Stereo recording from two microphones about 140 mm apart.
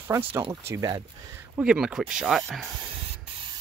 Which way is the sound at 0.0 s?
15° right (ahead or behind).